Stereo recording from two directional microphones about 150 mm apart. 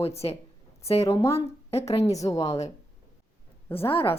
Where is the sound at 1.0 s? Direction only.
20° left (ahead or behind).